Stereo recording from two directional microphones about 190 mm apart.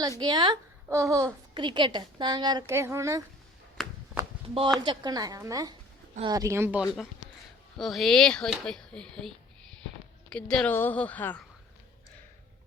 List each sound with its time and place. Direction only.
0.2 s a woman's voice: 20° right (ahead or behind)
3.8 s a sound: centre (ahead or behind)
4.4 s a woman's voice: 30° right (ahead or behind); by 6.8 s 10° right (ahead or behind)
7.8 s speech: centre (ahead or behind)
10.3 s a woman's voice: 5° left (ahead or behind)